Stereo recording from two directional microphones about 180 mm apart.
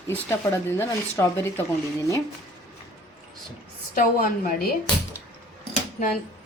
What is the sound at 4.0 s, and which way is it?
Speech, 55° left (ahead or behind).